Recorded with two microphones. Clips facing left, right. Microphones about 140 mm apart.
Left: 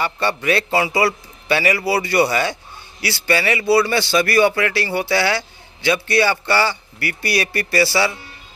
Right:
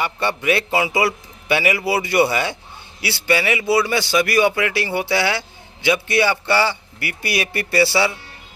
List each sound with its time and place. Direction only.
0.0 s a man's voice: 20° right (ahead or behind)